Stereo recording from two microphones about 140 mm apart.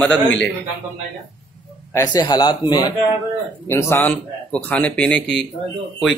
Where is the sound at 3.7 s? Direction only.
15° left (ahead or behind).